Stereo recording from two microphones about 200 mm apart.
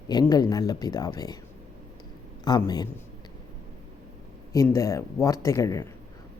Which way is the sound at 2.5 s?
20° left (ahead or behind).